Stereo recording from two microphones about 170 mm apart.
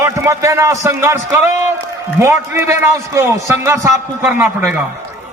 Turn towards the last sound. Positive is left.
turn(degrees=-15)  # may be behind; listen again after turning